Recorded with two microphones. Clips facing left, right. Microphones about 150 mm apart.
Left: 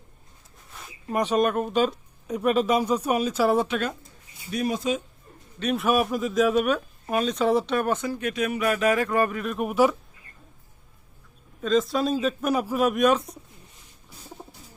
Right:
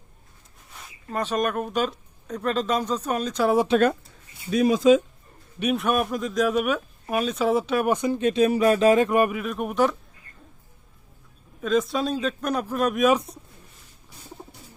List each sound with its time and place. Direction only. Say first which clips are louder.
1.1 s speech: left 3 dB; 15° left (ahead or behind)
3.7 s speech: right 8 dB; 35° right (ahead or behind)
4.8 s speech: right 14 dB; 90° right
5.7 s speech: left 2 dB; centre (ahead or behind); by 9.4 s 15° right (ahead or behind)
9.4 s speech: left 1 dB; centre (ahead or behind)
11.6 s speech: even; centre (ahead or behind)